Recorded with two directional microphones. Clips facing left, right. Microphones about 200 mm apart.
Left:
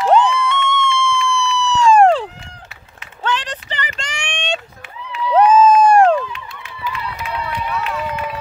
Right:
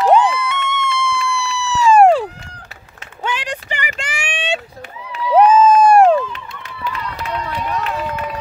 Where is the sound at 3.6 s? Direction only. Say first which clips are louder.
Right 2 dB; 10° right (ahead or behind).